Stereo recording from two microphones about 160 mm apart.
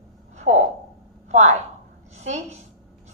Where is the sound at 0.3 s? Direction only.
45° right (ahead or behind).